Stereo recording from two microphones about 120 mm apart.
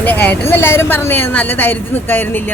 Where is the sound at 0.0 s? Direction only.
15° left (ahead or behind).